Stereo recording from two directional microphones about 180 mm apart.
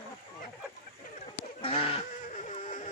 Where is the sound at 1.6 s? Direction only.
35° left (ahead or behind).